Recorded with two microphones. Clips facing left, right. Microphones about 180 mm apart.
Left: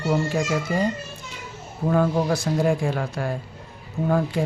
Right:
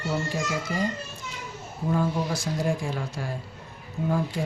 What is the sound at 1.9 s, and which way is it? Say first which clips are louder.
Speech: left 5 dB; 65° left (ahead or behind).